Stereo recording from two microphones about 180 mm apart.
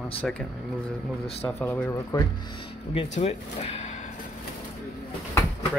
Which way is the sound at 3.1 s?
35° left (ahead or behind).